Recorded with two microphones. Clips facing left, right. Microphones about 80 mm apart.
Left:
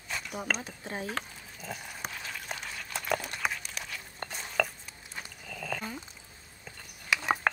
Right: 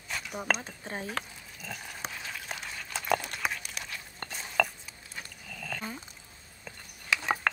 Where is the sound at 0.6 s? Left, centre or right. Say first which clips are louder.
Left 1 dB; right.